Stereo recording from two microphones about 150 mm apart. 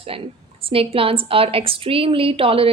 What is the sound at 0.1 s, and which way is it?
A woman's voice, 40° right (ahead or behind).